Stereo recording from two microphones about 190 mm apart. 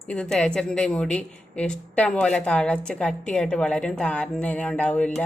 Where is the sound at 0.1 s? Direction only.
5° left (ahead or behind).